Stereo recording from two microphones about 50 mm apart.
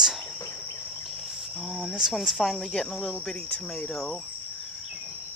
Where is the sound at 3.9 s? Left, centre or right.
Centre.